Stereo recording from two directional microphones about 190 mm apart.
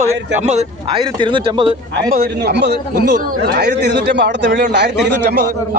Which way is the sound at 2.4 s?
60° right (ahead or behind).